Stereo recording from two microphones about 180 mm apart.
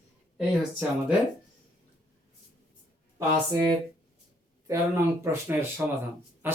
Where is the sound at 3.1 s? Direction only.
15° right (ahead or behind).